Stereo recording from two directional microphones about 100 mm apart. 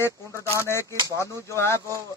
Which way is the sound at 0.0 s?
25° left (ahead or behind).